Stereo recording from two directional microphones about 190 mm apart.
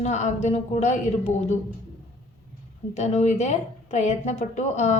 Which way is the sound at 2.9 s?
35° left (ahead or behind).